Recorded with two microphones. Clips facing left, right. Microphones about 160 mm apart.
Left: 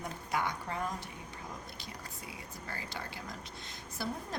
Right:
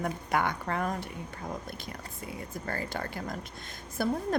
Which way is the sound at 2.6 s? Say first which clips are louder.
Right 8 dB; 55° right (ahead or behind).